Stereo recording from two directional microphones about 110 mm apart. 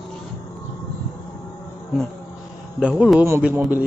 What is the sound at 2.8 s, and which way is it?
Speech, 5° right (ahead or behind).